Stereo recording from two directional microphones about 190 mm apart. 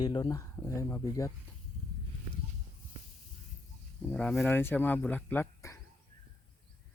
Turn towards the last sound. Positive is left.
turn(degrees=15)  # may be behind; listen again after turning